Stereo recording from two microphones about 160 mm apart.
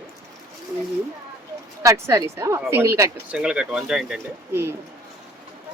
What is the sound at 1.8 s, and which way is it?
A woman's voice, 20° right (ahead or behind).